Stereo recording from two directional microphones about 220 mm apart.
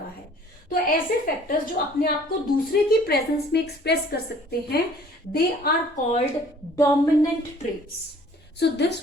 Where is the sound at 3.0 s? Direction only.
45° left (ahead or behind).